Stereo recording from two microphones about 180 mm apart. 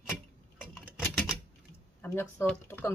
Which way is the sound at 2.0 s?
15° left (ahead or behind).